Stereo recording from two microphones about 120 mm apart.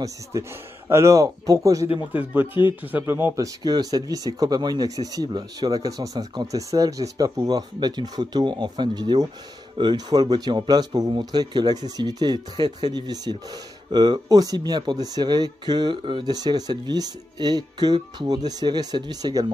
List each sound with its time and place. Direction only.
0.0 s speech: 25° right (ahead or behind)
2.1 s a man's voice: 15° right (ahead or behind)
3.3 s speech: 35° right (ahead or behind)